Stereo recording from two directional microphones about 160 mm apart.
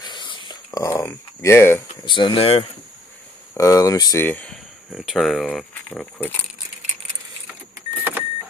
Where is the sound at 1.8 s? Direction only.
30° left (ahead or behind).